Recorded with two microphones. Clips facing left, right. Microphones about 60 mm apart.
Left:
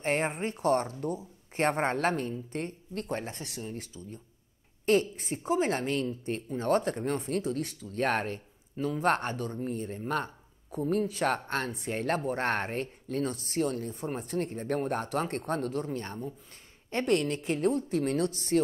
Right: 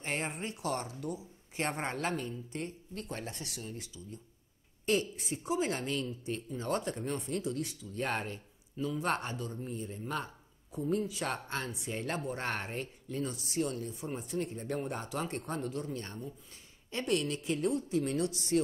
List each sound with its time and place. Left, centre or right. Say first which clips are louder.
0.0 s speech: left 7 dB; left